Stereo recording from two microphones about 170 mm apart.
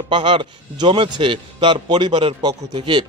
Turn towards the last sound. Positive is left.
turn(degrees=-30)  # may be behind; listen again after turning